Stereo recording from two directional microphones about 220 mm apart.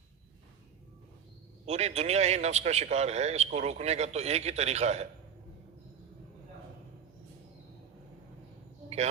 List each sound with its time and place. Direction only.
1.6 s a man's voice: 30° right (ahead or behind)